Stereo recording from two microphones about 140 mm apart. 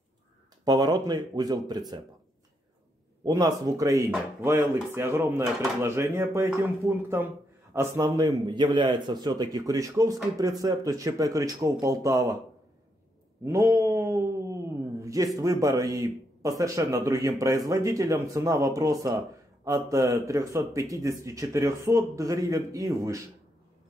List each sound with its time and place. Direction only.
0.7 s a man's voice: 30° right (ahead or behind)
3.3 s a man's voice: 25° right (ahead or behind)
8.5 s a man's voice: 30° right (ahead or behind)
13.4 s a sound: 20° right (ahead or behind)
15.3 s a man's voice: 25° right (ahead or behind)